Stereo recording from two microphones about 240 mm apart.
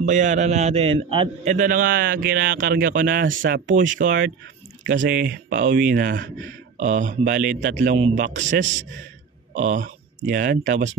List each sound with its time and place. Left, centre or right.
0.0 s a man's voice: right